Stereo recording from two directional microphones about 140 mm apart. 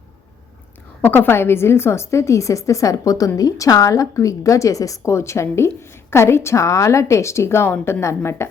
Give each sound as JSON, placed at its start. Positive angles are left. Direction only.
{"t": 1.0, "sound": "a woman's voice", "side_deg": 15}